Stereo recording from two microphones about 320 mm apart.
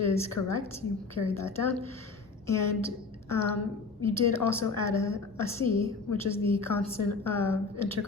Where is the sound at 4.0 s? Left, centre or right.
Centre.